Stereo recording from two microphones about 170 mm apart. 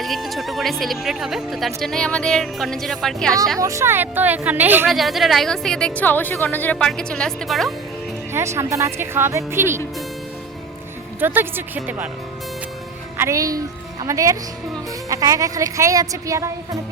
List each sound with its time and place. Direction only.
0.0 s a woman's voice: centre (ahead or behind)
3.6 s speech: 15° right (ahead or behind)
4.9 s a woman's voice: centre (ahead or behind)
8.3 s speech: 15° right (ahead or behind)
11.2 s speech: 10° right (ahead or behind)
13.1 s a woman's voice: 15° right (ahead or behind)